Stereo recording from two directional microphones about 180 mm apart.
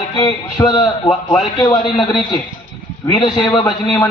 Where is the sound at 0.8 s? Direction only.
Centre (ahead or behind).